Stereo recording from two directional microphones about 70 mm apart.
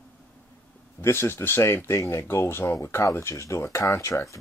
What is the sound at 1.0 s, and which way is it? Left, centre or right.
Speech, left.